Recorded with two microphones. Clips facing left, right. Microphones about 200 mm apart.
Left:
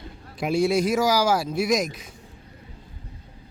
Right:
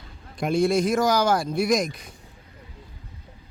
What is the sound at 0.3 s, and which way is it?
Speech, 5° left (ahead or behind).